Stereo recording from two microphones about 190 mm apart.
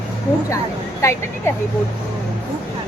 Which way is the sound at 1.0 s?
15° left (ahead or behind).